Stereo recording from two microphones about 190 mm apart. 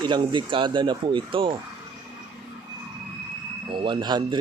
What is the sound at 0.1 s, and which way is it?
Speech, 25° right (ahead or behind).